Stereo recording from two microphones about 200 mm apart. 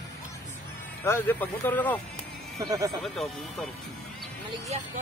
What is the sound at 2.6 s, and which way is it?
Speech, 15° right (ahead or behind).